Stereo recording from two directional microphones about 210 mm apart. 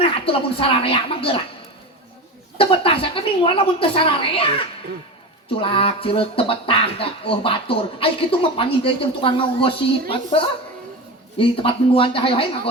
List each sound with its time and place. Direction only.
0.0 s speech: 25° left (ahead or behind)
2.6 s speech: 25° left (ahead or behind)
5.5 s speech: 25° left (ahead or behind)